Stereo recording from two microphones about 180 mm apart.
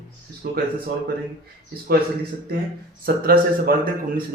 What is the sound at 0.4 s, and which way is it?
Speech, 60° right (ahead or behind).